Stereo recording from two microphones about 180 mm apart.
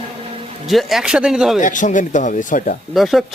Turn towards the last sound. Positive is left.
turn(degrees=0)  # may be behind; listen again after turning